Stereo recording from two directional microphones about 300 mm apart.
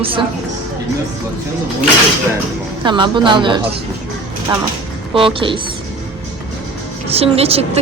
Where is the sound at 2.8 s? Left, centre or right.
Centre.